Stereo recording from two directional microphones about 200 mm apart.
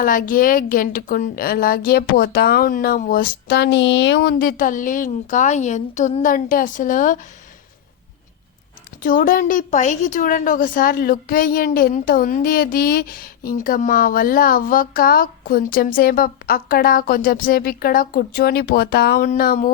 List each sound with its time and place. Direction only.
0.0 s a woman's voice: 45° left (ahead or behind)
9.0 s a woman's voice: 45° left (ahead or behind)